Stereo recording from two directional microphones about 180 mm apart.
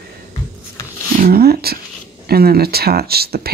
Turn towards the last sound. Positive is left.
turn(degrees=-60)  # may be behind; listen again after turning